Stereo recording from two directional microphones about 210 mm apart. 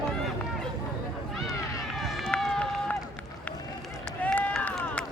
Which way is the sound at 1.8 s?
Centre (ahead or behind).